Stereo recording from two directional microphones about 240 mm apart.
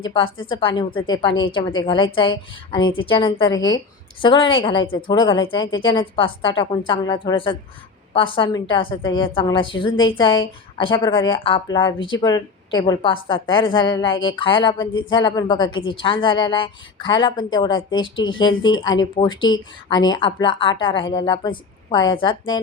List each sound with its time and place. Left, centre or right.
0.1 s a woman's voice: left